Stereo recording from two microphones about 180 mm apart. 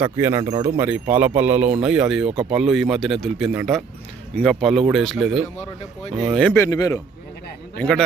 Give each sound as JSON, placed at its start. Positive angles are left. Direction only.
{"t": 0.0, "sound": "speech", "side_deg": -15}
{"t": 6.6, "sound": "a man's voice", "side_deg": 20}
{"t": 7.8, "sound": "speech", "side_deg": 5}